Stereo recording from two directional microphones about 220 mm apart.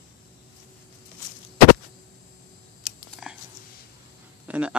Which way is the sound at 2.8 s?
Centre (ahead or behind).